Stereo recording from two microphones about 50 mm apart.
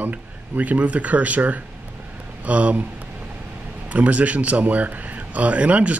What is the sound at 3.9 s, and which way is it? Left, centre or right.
Speech, right.